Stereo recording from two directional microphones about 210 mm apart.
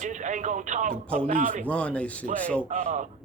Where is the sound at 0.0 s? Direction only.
35° right (ahead or behind).